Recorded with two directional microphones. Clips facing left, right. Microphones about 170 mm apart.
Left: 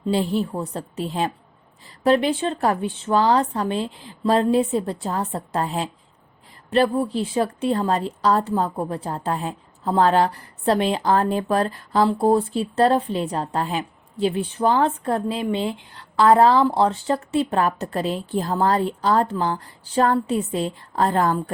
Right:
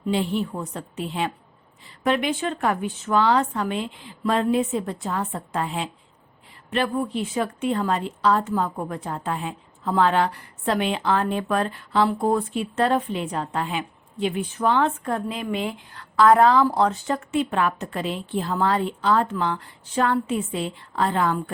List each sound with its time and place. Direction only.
0.1 s a woman's voice: 35° left (ahead or behind)